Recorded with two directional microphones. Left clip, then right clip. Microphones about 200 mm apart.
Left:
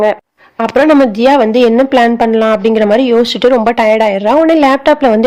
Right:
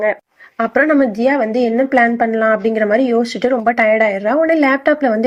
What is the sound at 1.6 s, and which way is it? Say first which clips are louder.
A woman's voice: left 5 dB; 30° left (ahead or behind).